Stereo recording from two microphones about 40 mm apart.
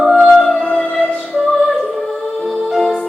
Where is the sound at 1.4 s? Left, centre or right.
Centre.